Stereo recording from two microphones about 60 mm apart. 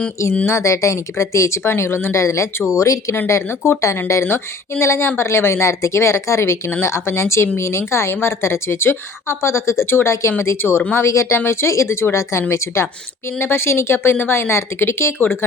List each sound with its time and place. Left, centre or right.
0.4 s speech: left
4.8 s speech: left
10.9 s speech: left